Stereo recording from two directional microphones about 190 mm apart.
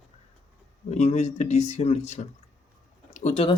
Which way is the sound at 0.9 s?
35° left (ahead or behind).